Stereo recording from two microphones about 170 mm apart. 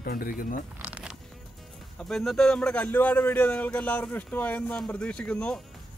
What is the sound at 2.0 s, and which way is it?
Speech, centre (ahead or behind).